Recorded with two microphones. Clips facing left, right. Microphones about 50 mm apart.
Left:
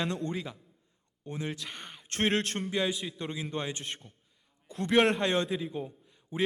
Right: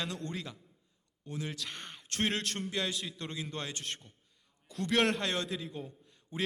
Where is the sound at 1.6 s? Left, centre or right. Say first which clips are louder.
Even; centre.